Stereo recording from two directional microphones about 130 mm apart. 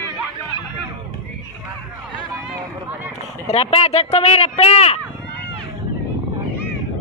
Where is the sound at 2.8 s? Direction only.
15° right (ahead or behind).